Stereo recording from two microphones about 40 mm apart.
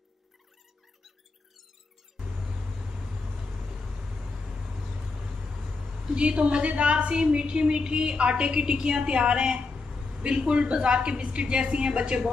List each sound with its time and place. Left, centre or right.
2.1 s vehicle: centre
6.1 s speech: right